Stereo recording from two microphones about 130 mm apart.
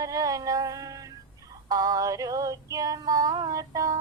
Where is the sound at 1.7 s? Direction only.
30° right (ahead or behind).